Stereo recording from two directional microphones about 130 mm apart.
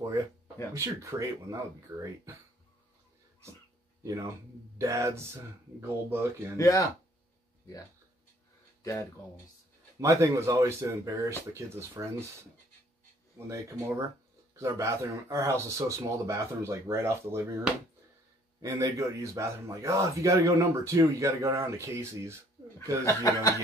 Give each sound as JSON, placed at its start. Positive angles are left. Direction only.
{"t": 0.7, "sound": "speech", "side_deg": -25}
{"t": 4.0, "sound": "speech", "side_deg": -25}
{"t": 6.5, "sound": "speech", "side_deg": 25}
{"t": 8.8, "sound": "speech", "side_deg": 25}
{"t": 9.9, "sound": "speech", "side_deg": -20}
{"t": 13.5, "sound": "speech", "side_deg": -25}
{"t": 18.6, "sound": "speech", "side_deg": -25}
{"t": 23.0, "sound": "speech", "side_deg": 25}